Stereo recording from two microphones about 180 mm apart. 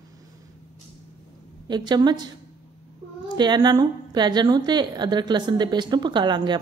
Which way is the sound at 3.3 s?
25° right (ahead or behind).